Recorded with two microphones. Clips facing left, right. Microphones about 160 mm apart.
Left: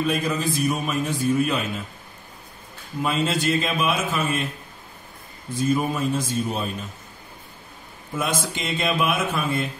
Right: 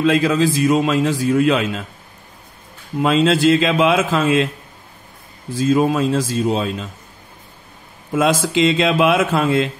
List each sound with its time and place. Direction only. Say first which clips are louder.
0.0 s a man's voice: right 8 dB; 90° right
3.0 s a man's voice: right 9 dB; 90° right
5.5 s a man's voice: right 7 dB; 90° right
8.1 s a man's voice: right 9 dB; 90° right